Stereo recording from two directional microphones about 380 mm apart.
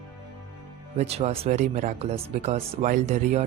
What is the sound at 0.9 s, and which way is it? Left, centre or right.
Speech, centre.